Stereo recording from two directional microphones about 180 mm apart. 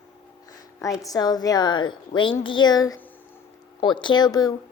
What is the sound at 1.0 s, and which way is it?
A woman's voice, 20° left (ahead or behind).